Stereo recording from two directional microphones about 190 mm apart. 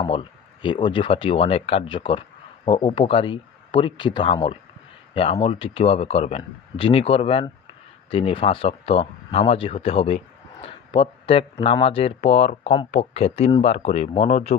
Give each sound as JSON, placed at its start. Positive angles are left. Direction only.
{"t": 0.0, "sound": "speech", "side_deg": 25}